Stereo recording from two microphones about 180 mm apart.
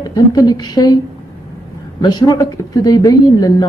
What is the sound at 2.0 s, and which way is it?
A woman's voice, 25° left (ahead or behind).